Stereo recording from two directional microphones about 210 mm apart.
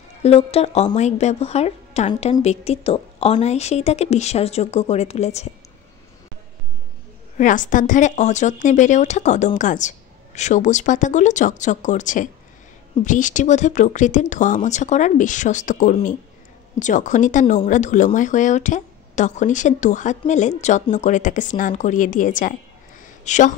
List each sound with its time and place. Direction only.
0.2 s speech: 30° left (ahead or behind)
7.3 s speech: 35° left (ahead or behind)